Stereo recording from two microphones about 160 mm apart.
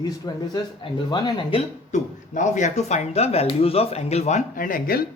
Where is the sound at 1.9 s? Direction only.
50° left (ahead or behind).